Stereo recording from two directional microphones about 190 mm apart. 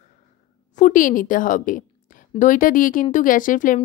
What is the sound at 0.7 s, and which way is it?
A woman's voice, 45° left (ahead or behind).